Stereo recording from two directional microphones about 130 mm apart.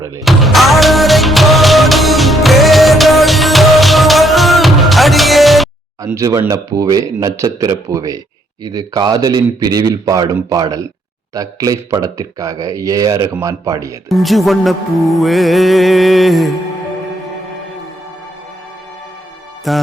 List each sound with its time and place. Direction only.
0.3 s music: centre (ahead or behind)
6.1 s speech: 25° right (ahead or behind)
14.1 s music: centre (ahead or behind)
19.7 s music: centre (ahead or behind)